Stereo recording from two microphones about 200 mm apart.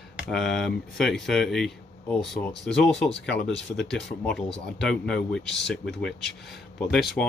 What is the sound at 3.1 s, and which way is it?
Speech, 65° left (ahead or behind).